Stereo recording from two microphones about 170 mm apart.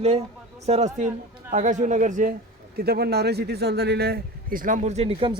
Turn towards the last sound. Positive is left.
turn(degrees=-35)  # may be behind; listen again after turning